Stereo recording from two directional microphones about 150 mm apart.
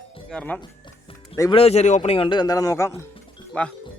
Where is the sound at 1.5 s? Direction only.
45° left (ahead or behind); by 2.9 s 20° left (ahead or behind).